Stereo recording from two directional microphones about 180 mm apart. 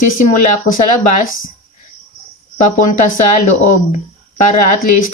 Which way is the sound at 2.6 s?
45° left (ahead or behind).